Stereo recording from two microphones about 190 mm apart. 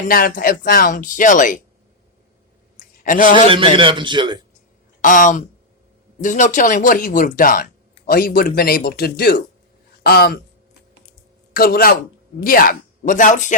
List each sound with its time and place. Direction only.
0.1 s speech: 50° left (ahead or behind)
2.7 s a sound: 45° left (ahead or behind)
3.5 s a man's voice: 25° right (ahead or behind)
5.0 s speech: 45° left (ahead or behind)
11.5 s speech: 50° left (ahead or behind)